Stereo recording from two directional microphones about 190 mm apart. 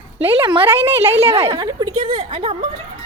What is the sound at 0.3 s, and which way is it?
A woman's voice, 25° right (ahead or behind).